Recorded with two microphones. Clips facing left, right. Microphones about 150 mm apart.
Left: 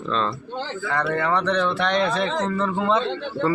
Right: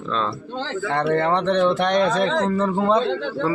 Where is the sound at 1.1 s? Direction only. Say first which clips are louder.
Right 3 dB; 25° right (ahead or behind).